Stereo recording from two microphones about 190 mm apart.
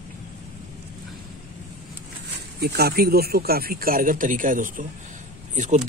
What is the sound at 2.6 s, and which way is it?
Speech, 55° right (ahead or behind).